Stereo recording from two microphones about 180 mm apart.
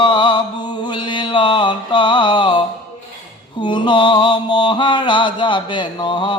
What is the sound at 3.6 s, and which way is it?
Mantra, 25° left (ahead or behind).